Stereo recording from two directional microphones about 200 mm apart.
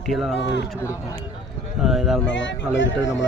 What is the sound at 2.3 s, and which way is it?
Speech, 65° left (ahead or behind).